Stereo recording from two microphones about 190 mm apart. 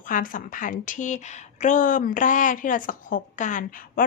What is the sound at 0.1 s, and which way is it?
A woman's voice, 45° left (ahead or behind).